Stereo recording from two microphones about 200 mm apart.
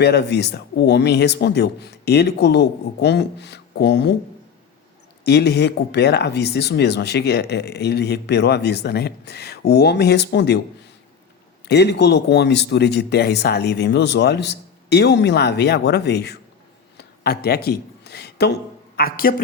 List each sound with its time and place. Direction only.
0.0 s speech: 55° left (ahead or behind)
5.2 s speech: 55° left (ahead or behind)
11.7 s speech: 55° left (ahead or behind)
17.0 s a sound: 50° left (ahead or behind)